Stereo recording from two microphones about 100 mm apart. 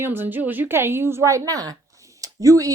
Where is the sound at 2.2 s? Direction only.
35° right (ahead or behind).